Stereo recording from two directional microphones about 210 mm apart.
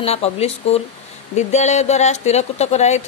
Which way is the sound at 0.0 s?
30° left (ahead or behind).